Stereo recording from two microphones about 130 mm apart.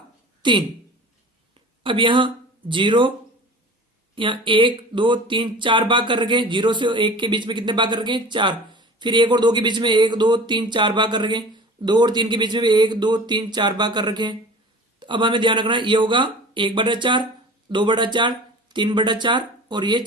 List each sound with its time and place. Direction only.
0.4 s speech: 40° right (ahead or behind)
1.8 s speech: 40° right (ahead or behind)
4.1 s speech: 40° right (ahead or behind)